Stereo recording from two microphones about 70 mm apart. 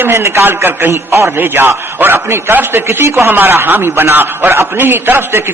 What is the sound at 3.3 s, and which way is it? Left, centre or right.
Mantra, right.